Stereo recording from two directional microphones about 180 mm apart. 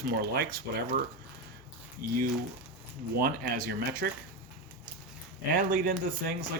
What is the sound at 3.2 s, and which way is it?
Speech, 55° right (ahead or behind).